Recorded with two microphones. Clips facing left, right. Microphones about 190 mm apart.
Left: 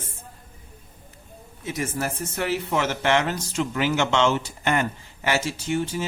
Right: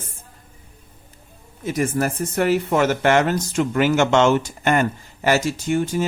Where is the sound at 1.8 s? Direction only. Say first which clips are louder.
Right 7 dB; 55° right (ahead or behind).